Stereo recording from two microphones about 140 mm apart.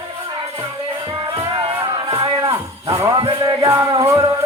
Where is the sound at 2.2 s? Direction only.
25° right (ahead or behind).